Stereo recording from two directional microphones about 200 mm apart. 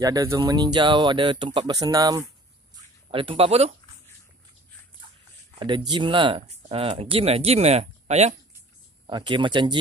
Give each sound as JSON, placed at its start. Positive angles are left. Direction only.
{"t": 0.0, "sound": "speech", "side_deg": -20}
{"t": 5.5, "sound": "speech", "side_deg": -25}
{"t": 9.0, "sound": "speech", "side_deg": -25}